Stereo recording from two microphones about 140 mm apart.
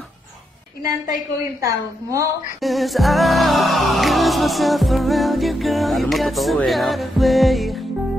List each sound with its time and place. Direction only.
1.6 s a woman's voice: 25° right (ahead or behind)
2.6 s music: centre (ahead or behind)